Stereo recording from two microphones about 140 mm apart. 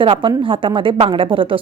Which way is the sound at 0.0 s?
35° right (ahead or behind).